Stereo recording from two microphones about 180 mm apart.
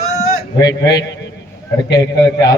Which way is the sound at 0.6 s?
20° left (ahead or behind).